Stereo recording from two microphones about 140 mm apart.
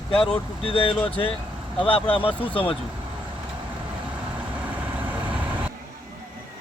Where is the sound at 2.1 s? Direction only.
40° left (ahead or behind).